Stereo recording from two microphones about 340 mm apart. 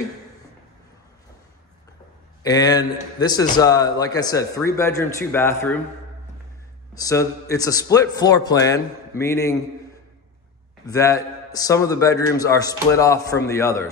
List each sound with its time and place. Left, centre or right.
2.4 s a man's voice: centre
6.9 s a man's voice: centre
10.9 s a man's voice: centre